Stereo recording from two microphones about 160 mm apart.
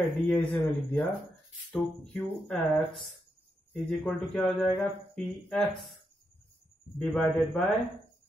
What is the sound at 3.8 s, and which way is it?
Speech, 5° left (ahead or behind).